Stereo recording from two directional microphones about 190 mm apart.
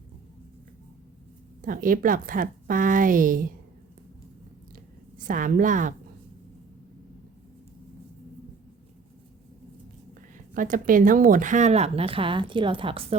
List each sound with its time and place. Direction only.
1.6 s speech: 45° right (ahead or behind)
4.7 s a sound: 45° right (ahead or behind)
10.3 s speech: 45° right (ahead or behind); by 13.1 s 30° right (ahead or behind)